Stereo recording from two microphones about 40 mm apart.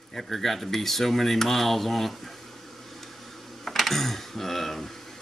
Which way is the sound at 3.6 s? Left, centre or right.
Centre.